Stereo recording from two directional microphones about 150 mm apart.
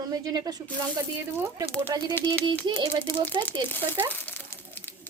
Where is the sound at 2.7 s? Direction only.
30° right (ahead or behind).